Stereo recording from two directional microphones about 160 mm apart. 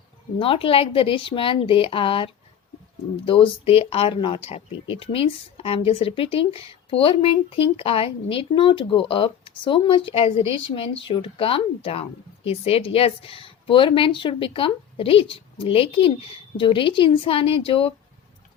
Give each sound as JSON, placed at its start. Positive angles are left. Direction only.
{"t": 0.3, "sound": "speech", "side_deg": 35}